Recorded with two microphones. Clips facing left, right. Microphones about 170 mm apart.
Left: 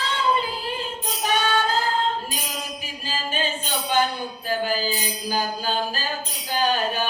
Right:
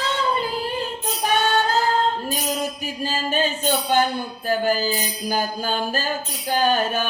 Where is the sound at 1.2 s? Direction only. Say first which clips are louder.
Right 2 dB; 45° right (ahead or behind).